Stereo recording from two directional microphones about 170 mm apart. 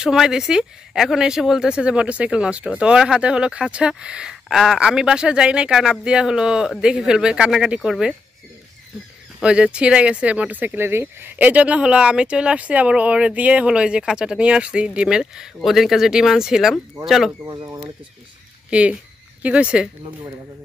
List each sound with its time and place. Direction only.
0.0 s speech: 5° right (ahead or behind)
9.4 s speech: 5° right (ahead or behind)
17.5 s speech: 25° right (ahead or behind)
18.7 s speech: 5° right (ahead or behind)